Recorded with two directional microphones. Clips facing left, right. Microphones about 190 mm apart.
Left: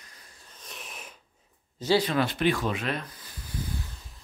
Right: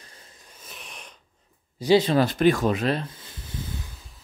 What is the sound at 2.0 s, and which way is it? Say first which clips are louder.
Speech: right 6 dB; 35° right (ahead or behind).